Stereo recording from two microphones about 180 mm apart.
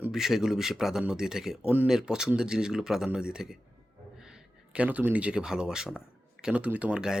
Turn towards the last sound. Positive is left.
turn(degrees=-5)  # may be behind; listen again after turning